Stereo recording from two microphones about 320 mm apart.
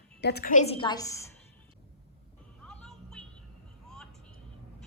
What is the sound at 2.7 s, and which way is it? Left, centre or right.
Music, centre.